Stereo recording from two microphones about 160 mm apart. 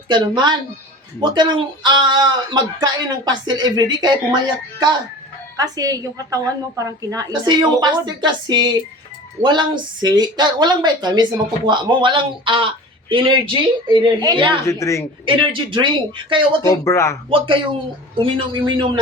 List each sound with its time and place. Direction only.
0.1 s a woman's voice: 25° right (ahead or behind)
5.5 s a woman's voice: 25° right (ahead or behind)
14.7 s speech: 20° left (ahead or behind)
15.3 s a man's voice: 30° right (ahead or behind)
16.6 s speech: 15° left (ahead or behind)
17.2 s a man's voice: 35° right (ahead or behind)